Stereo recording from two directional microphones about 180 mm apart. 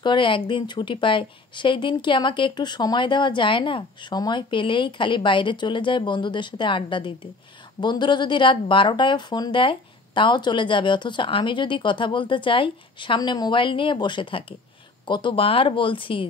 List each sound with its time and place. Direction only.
0.0 s speech: 25° left (ahead or behind)